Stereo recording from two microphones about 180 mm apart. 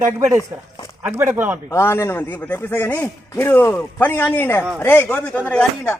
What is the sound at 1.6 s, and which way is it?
A man's voice, 15° left (ahead or behind).